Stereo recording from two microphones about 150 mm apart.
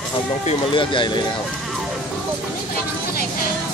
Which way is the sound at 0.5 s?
35° left (ahead or behind).